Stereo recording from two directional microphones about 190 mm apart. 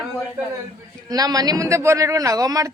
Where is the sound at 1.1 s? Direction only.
20° right (ahead or behind).